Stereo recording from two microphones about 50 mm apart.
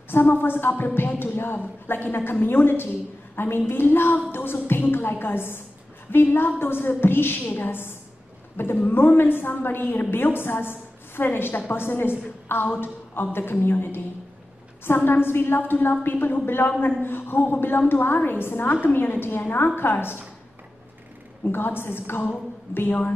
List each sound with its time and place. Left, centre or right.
0.1 s a woman's voice: left
15.0 s a woman's voice: left
21.5 s a woman's voice: left